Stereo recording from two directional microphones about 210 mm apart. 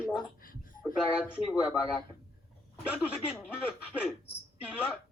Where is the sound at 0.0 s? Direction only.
5° right (ahead or behind).